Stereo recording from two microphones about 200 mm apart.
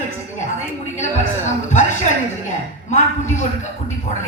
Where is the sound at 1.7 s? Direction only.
35° left (ahead or behind).